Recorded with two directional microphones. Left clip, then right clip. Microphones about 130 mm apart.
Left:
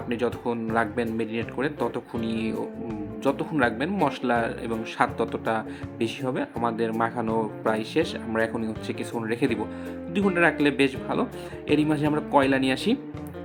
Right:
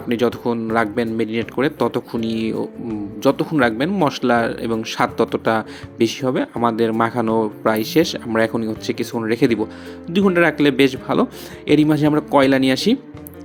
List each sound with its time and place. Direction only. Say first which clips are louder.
0.1 s speech: right 8 dB; 45° right (ahead or behind)